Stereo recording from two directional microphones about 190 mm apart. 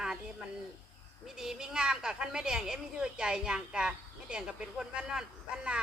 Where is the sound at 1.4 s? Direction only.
5° right (ahead or behind).